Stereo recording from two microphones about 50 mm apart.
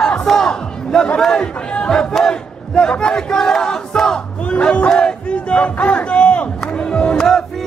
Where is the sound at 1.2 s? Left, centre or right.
Centre.